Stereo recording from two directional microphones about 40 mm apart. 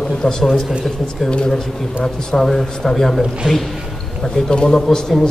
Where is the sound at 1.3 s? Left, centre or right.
Centre.